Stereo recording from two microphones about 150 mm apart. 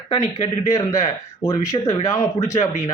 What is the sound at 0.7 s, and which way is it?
A man's voice, 20° left (ahead or behind).